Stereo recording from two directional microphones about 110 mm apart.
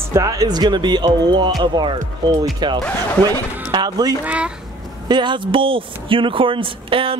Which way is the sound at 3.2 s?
40° right (ahead or behind).